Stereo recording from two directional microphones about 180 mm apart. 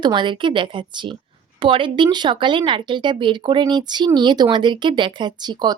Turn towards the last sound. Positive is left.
turn(degrees=-25)  # may be behind; listen again after turning